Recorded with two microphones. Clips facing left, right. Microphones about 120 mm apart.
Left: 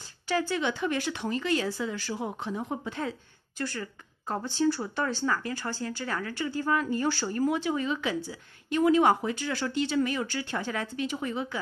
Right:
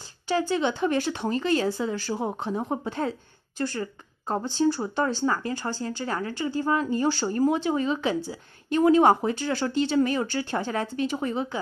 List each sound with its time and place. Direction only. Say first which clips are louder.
0.3 s speech: right 4 dB; 30° right (ahead or behind)